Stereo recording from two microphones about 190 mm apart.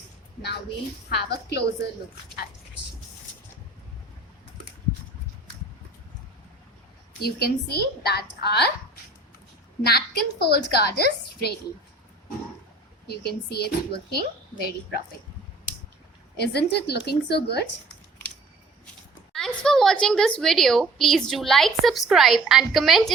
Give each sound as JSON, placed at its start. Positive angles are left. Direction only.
{"t": 1.1, "sound": "a woman's voice", "side_deg": 60}
{"t": 7.2, "sound": "a woman's voice", "side_deg": 55}
{"t": 9.8, "sound": "a woman's voice", "side_deg": 55}
{"t": 13.1, "sound": "a woman's voice", "side_deg": 55}
{"t": 16.4, "sound": "a woman's voice", "side_deg": 60}
{"t": 19.3, "sound": "a woman's voice", "side_deg": 0}